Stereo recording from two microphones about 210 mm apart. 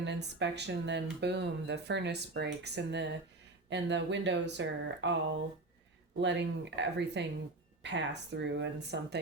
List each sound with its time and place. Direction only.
0.0 s speech: 55° right (ahead or behind)
6.1 s speech: 55° right (ahead or behind)